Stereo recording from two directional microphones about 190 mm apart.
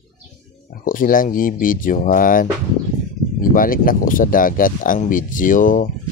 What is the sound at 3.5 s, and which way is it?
Speech, 45° left (ahead or behind).